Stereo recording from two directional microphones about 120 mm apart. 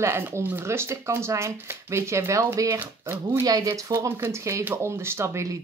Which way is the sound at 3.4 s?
30° right (ahead or behind).